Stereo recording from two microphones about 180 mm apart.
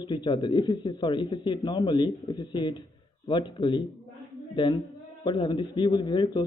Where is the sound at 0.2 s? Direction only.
25° left (ahead or behind).